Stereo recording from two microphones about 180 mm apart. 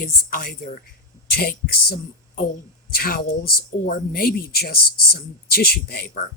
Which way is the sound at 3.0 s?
55° left (ahead or behind).